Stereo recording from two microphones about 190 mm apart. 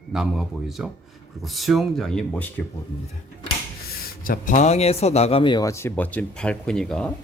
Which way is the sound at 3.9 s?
50° left (ahead or behind).